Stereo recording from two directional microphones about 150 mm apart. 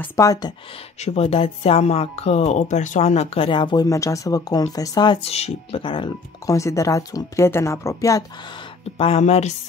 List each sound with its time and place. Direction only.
0.0 s speech: 20° left (ahead or behind)
1.0 s speech: 45° left (ahead or behind)
3.4 s speech: 30° left (ahead or behind)
5.3 s speech: 40° left (ahead or behind)
6.4 s speech: 20° left (ahead or behind)
8.9 s speech: 40° left (ahead or behind)